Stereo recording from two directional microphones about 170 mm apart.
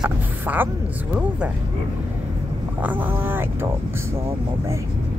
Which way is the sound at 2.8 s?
10° right (ahead or behind).